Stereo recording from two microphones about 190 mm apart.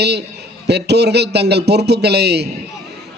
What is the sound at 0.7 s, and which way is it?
A man's voice, 60° right (ahead or behind).